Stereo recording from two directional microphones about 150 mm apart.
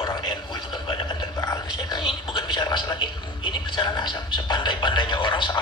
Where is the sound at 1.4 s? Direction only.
30° left (ahead or behind).